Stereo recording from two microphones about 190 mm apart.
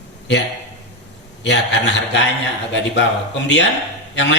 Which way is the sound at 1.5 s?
70° left (ahead or behind).